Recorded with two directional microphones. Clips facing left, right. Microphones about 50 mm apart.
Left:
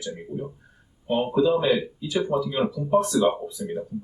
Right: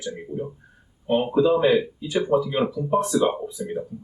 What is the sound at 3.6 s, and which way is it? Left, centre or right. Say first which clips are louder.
Speech: right 2 dB; right.